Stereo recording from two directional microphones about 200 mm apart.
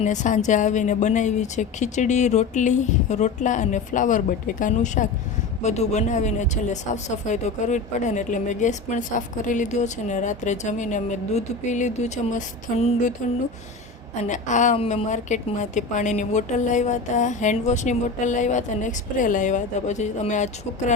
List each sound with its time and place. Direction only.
0.0 s speech: 35° left (ahead or behind)
14.3 s speech: 40° left (ahead or behind)